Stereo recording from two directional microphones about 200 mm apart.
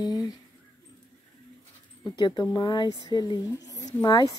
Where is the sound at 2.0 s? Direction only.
20° left (ahead or behind).